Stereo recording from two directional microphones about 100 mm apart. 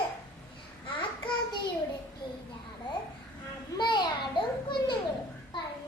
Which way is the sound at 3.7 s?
50° left (ahead or behind).